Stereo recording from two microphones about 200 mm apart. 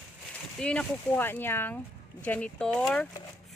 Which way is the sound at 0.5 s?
5° left (ahead or behind).